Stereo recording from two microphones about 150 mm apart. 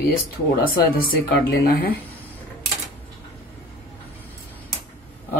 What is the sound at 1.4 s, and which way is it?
Speech, 85° left.